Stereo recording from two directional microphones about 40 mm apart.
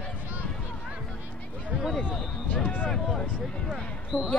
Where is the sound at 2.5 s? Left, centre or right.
Left.